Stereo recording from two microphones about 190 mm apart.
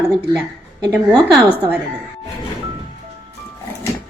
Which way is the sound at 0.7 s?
20° right (ahead or behind).